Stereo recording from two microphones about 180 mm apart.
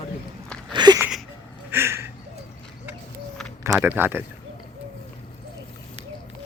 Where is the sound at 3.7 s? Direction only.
5° right (ahead or behind).